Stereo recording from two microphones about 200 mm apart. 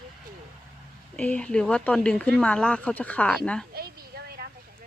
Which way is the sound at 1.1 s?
5° left (ahead or behind).